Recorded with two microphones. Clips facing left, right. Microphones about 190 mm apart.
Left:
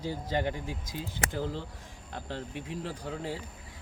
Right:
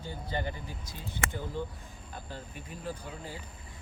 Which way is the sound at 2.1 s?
75° left (ahead or behind).